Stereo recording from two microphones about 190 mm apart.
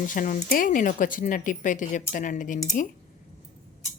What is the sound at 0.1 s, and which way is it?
Speech, 45° left (ahead or behind).